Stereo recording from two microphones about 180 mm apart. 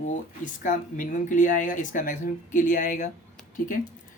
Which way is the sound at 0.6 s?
45° left (ahead or behind).